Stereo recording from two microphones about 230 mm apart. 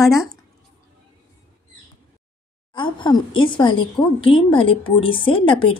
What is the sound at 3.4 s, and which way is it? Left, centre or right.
A woman's voice, left.